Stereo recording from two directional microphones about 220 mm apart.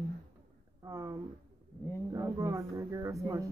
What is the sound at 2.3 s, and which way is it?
Speech, 15° right (ahead or behind).